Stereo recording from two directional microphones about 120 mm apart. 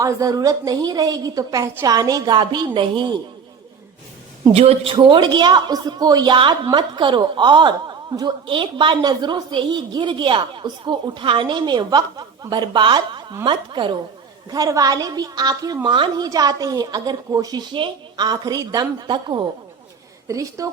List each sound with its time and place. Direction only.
0.0 s a woman's voice: 30° right (ahead or behind)
4.5 s a woman's voice: 55° right (ahead or behind)
14.5 s a woman's voice: 30° right (ahead or behind)
20.2 s a woman's voice: 30° right (ahead or behind)